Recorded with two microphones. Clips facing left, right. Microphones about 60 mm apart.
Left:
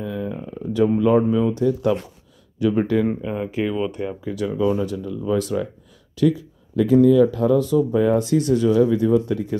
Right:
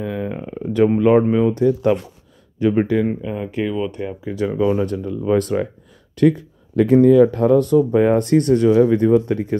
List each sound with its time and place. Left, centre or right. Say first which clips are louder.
0.0 s a sound: right 3 dB; right
1.6 s speech: right 3 dB; right
2.9 s speech: right 1 dB; centre
3.2 s speech: right 1 dB; centre
4.4 s speech: right 3 dB; right
4.8 s speech: right 4 dB; right